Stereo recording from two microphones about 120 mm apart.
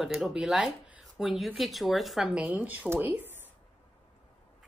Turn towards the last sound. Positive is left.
turn(degrees=-15)  # may be behind; listen again after turning